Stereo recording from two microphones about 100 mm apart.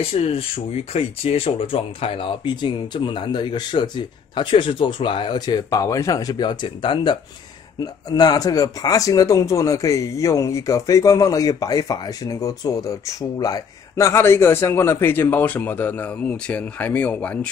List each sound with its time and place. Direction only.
0.0 s speech: 70° left (ahead or behind); by 7.2 s 55° left (ahead or behind)
7.8 s a man's voice: 40° left (ahead or behind); by 17.5 s 15° left (ahead or behind)